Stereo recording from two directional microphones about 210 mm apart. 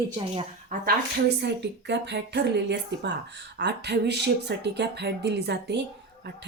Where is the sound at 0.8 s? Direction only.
50° right (ahead or behind).